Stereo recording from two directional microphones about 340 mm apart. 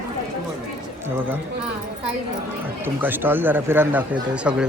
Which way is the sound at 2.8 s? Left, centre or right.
Centre.